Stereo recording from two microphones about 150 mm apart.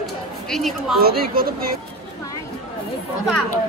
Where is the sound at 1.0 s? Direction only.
85° right.